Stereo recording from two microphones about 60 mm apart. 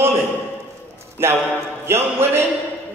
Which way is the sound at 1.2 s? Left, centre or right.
Right.